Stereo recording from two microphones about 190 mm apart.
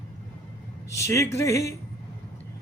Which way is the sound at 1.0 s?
15° left (ahead or behind).